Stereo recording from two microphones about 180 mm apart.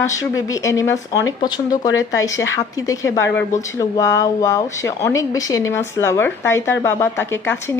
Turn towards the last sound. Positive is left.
turn(degrees=15)  # may be behind; listen again after turning